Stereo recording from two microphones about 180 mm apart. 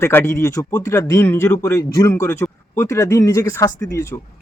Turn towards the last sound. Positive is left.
turn(degrees=15)  # may be behind; listen again after turning